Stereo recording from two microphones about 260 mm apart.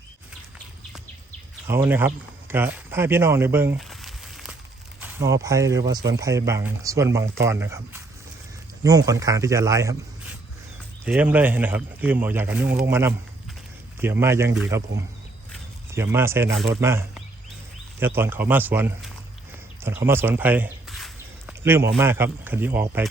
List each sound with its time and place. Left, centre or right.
1.6 s speech: centre
15.9 s speech: centre
19.8 s a sound: centre
21.6 s a man's voice: centre